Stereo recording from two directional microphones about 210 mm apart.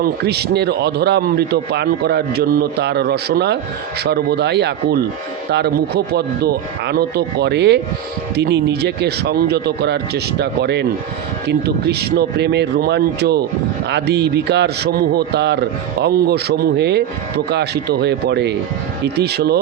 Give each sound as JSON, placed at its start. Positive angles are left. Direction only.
{"t": 0.0, "sound": "a man's voice", "side_deg": -50}